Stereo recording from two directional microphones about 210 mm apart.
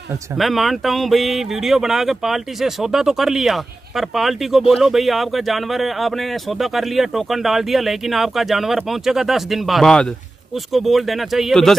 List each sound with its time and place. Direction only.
0.4 s speech: centre (ahead or behind)